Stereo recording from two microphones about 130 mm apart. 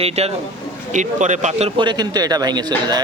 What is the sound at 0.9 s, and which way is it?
Speech, 70° right (ahead or behind).